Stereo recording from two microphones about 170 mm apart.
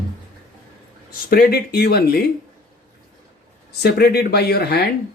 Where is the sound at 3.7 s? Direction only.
70° left (ahead or behind).